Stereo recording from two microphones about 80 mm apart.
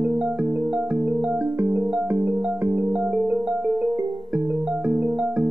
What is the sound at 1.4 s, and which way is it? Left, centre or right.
Music, right.